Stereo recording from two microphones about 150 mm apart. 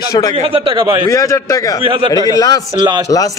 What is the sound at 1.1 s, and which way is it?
Speech, 20° left (ahead or behind).